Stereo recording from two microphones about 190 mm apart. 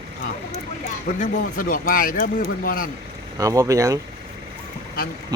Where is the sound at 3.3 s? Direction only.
15° right (ahead or behind).